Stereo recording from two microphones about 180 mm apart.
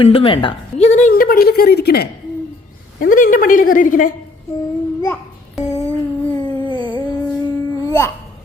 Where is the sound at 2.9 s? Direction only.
45° left (ahead or behind).